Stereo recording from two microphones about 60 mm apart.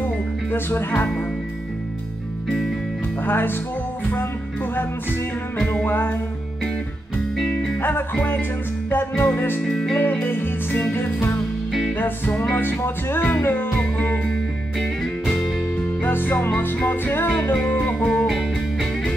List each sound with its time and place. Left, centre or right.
0.5 s music: left
3.3 s music: left
5.9 s music: left
7.8 s music: left
9.6 s music: centre
9.9 s music: left
12.3 s music: centre
12.5 s music: left
13.7 s music: left
14.8 s music: centre
16.0 s music: left
18.2 s music: centre